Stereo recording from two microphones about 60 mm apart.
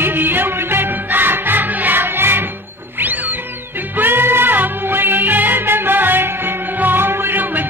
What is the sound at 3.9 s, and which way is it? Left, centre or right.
Music, right.